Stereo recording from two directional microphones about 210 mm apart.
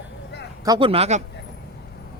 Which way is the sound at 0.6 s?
20° right (ahead or behind).